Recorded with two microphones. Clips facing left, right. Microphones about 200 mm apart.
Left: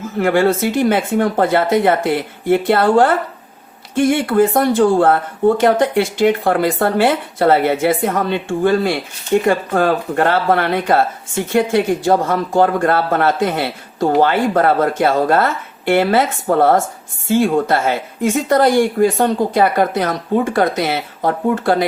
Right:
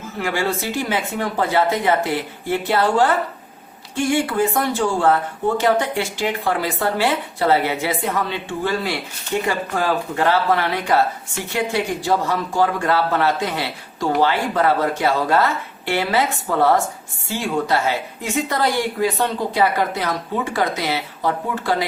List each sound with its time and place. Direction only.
0.2 s speech: 55° left (ahead or behind)